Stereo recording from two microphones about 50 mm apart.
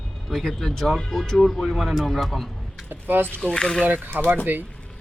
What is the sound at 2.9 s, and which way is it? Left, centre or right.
Speech, right.